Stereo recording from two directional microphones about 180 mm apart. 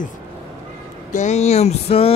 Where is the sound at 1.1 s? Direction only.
40° left (ahead or behind).